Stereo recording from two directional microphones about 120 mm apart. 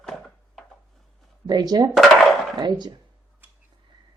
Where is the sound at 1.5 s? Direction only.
35° right (ahead or behind).